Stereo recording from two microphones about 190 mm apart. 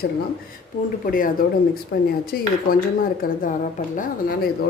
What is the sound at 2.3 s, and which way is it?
A woman's voice, 50° left (ahead or behind).